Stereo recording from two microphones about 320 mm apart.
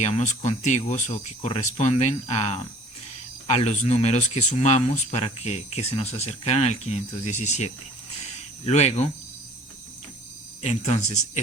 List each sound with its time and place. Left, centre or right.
0.0 s speech: left
10.6 s speech: left